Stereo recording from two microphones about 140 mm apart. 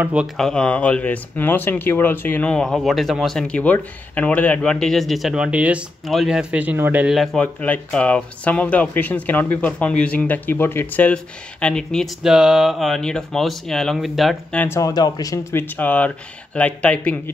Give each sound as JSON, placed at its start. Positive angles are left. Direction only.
{"t": 0.0, "sound": "speech", "side_deg": -10}
{"t": 0.4, "sound": "speech", "side_deg": 5}
{"t": 7.2, "sound": "speech", "side_deg": 10}
{"t": 14.6, "sound": "speech", "side_deg": 20}